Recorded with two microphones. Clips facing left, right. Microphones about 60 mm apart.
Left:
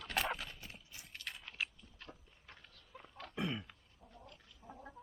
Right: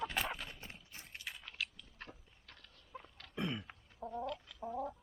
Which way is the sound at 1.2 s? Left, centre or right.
Centre.